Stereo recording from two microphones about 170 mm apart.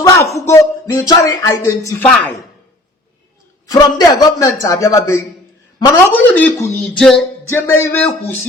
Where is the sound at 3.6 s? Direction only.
20° left (ahead or behind).